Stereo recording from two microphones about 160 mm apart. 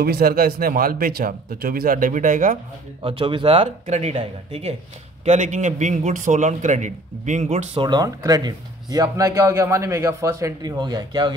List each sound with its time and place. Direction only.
0.0 s speech: 70° right (ahead or behind); by 2.6 s 55° right (ahead or behind)
3.0 s a man's voice: 35° right (ahead or behind)